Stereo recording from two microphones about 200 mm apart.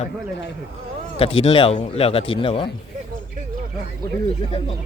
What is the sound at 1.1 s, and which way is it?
Speech, 30° left (ahead or behind).